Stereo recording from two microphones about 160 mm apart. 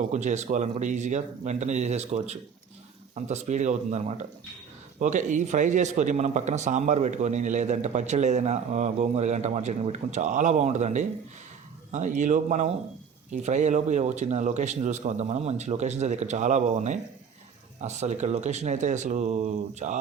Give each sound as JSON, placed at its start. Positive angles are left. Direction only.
{"t": 0.0, "sound": "speech", "side_deg": -50}